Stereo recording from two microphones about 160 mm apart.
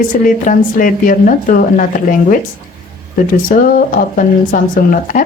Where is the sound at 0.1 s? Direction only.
55° left (ahead or behind).